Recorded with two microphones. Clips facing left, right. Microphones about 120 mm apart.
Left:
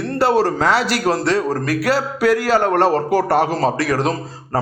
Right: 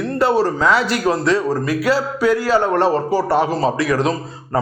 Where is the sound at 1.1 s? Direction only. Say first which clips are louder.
Even; 35° left (ahead or behind).